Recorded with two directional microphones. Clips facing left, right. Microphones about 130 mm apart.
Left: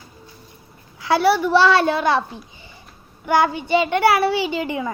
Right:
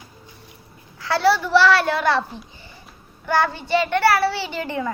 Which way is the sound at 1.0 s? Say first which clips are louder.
Left 2 dB; 15° left (ahead or behind).